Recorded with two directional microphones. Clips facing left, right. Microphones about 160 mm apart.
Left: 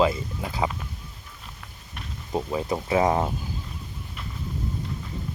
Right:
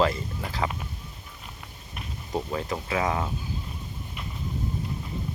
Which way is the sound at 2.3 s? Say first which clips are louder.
Left 3 dB; 15° left (ahead or behind).